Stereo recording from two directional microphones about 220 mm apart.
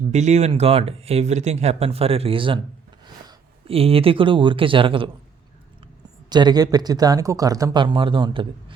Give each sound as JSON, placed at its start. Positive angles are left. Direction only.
{"t": 0.1, "sound": "speech", "side_deg": -30}
{"t": 6.3, "sound": "speech", "side_deg": -20}